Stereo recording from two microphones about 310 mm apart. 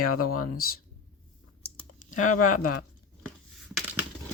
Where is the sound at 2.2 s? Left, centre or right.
Left.